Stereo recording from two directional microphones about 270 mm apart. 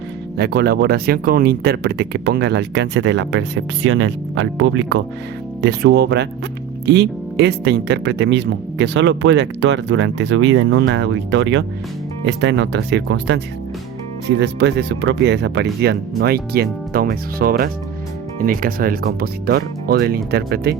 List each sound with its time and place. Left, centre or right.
0.3 s speech: right